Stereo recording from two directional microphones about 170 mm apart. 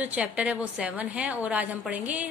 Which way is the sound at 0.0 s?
10° right (ahead or behind).